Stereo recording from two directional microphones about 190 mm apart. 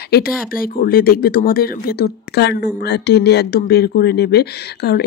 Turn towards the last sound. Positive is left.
turn(degrees=60)  # may be behind; listen again after turning